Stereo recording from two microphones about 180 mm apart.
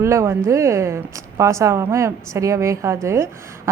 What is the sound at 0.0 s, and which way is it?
A woman's voice, 15° right (ahead or behind).